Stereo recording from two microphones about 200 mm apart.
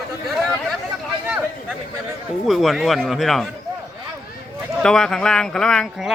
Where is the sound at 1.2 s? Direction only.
5° right (ahead or behind).